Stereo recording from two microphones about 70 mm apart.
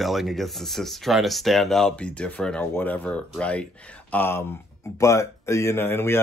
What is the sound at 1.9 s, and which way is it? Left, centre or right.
Speech, centre.